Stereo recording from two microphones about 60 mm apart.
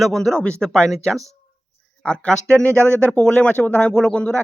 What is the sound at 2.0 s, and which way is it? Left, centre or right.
Speech, centre.